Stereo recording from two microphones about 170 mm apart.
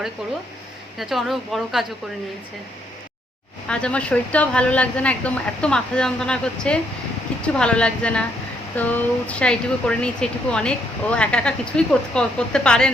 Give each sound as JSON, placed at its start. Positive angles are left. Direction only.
{"t": 0.2, "sound": "speech", "side_deg": 0}
{"t": 3.7, "sound": "a woman's voice", "side_deg": 5}